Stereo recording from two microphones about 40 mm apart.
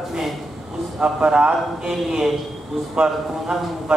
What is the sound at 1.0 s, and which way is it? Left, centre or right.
Speech, right.